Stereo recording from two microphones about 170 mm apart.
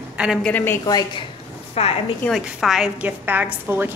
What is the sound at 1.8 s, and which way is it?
Speech, 35° left (ahead or behind).